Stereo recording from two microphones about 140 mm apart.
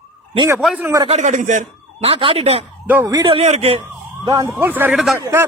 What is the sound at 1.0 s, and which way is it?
Speech, 55° right (ahead or behind).